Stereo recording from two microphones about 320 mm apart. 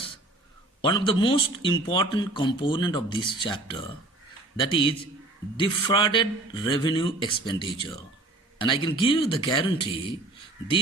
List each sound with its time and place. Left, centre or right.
0.8 s speech: centre